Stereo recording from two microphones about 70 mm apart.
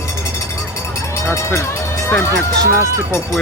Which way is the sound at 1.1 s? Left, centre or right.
Left.